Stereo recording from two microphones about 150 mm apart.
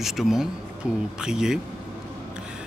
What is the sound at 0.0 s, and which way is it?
A man's voice, centre (ahead or behind).